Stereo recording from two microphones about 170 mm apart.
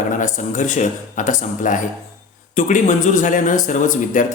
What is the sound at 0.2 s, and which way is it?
Speech, 45° left (ahead or behind).